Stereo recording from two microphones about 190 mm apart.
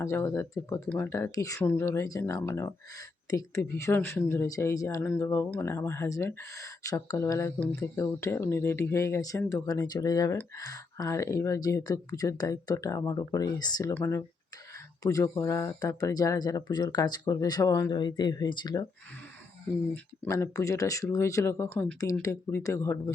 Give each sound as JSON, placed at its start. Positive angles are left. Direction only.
{"t": 0.0, "sound": "speech", "side_deg": 15}
{"t": 19.9, "sound": "speech", "side_deg": 15}